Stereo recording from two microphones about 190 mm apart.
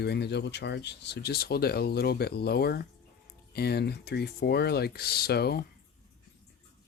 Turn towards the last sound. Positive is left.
turn(degrees=55)  # may be behind; listen again after turning